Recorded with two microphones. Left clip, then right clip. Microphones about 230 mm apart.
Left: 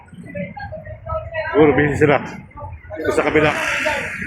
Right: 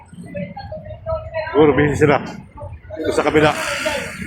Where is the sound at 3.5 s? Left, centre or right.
Right.